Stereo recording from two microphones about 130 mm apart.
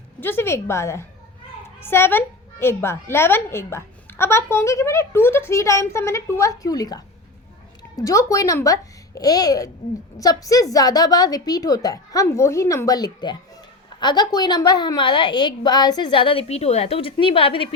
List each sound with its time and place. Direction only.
0.2 s a woman's voice: 15° left (ahead or behind); by 17.7 s 40° left (ahead or behind)